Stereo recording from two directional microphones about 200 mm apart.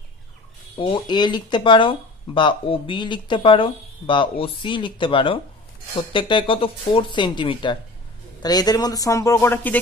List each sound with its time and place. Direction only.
0.7 s speech: 25° left (ahead or behind)